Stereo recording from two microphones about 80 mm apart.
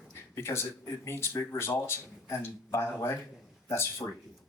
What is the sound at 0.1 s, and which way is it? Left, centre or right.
Speech, left.